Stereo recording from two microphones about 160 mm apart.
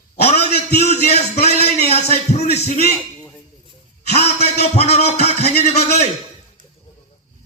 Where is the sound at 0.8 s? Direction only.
40° left (ahead or behind).